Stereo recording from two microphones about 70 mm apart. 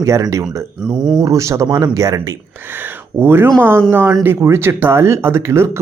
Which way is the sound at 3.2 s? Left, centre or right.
Right.